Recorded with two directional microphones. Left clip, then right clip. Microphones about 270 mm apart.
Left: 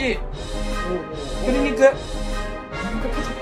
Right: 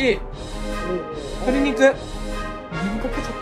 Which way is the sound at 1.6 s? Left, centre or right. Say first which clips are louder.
Left 1 dB; right.